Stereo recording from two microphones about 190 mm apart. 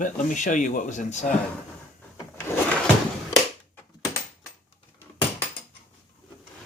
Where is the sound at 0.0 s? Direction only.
40° left (ahead or behind).